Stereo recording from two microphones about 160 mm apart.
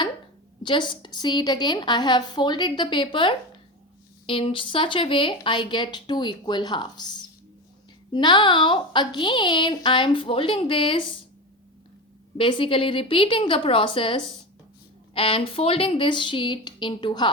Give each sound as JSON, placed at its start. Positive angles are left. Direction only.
{"t": 0.6, "sound": "a woman's voice", "side_deg": 30}
{"t": 12.4, "sound": "a woman's voice", "side_deg": 30}